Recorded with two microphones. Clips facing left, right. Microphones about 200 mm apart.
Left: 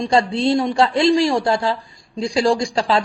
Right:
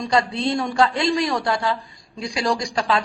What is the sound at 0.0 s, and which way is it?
A man's voice, 30° left (ahead or behind).